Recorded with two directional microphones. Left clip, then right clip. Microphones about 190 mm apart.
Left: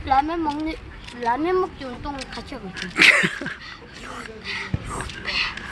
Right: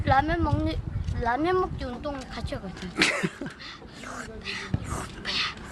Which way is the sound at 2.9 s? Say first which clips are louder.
Left 10 dB; 5° right (ahead or behind).